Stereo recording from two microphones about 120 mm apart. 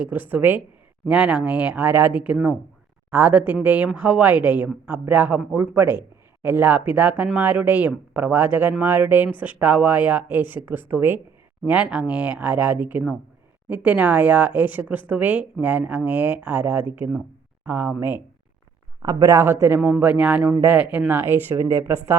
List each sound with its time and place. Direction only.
0.0 s speech: 15° right (ahead or behind)
19.0 s speech: 30° right (ahead or behind)